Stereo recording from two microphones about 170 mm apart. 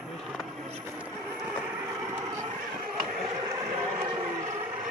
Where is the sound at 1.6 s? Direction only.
10° right (ahead or behind).